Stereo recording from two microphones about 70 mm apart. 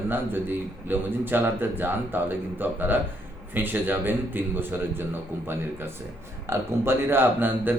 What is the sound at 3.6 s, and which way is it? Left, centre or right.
A man's voice, right.